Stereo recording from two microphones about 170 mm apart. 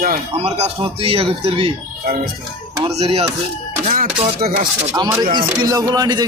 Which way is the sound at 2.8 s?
35° right (ahead or behind).